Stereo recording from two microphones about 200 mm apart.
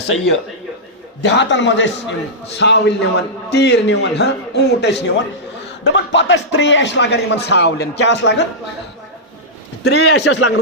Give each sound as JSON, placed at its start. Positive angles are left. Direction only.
{"t": 1.2, "sound": "speech", "side_deg": 60}
{"t": 9.8, "sound": "speech", "side_deg": 55}